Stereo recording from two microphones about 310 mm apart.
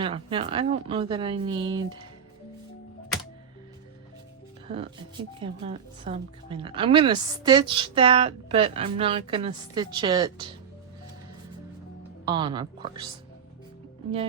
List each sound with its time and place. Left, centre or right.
0.0 s speech: centre
4.7 s speech: centre
12.2 s speech: centre